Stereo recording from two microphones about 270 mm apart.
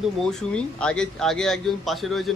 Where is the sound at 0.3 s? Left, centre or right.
Centre.